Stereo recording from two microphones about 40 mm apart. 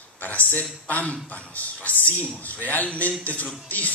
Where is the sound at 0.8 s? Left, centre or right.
Left.